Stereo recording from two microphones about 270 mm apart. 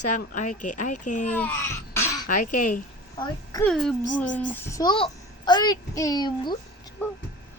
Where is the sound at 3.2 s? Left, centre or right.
Centre.